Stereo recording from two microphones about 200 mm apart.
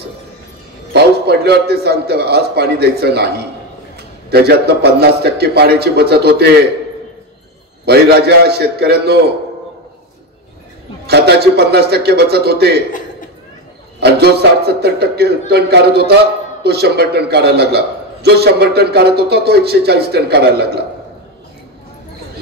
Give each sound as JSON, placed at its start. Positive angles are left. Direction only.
{"t": 0.9, "sound": "a man's voice", "side_deg": -55}
{"t": 7.8, "sound": "a man's voice", "side_deg": -55}
{"t": 11.1, "sound": "a man's voice", "side_deg": -55}
{"t": 13.9, "sound": "a man's voice", "side_deg": -55}